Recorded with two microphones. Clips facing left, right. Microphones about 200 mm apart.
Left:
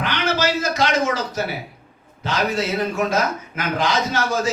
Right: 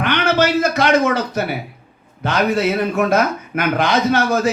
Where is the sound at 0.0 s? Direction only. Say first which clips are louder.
Right 5 dB; 60° right (ahead or behind).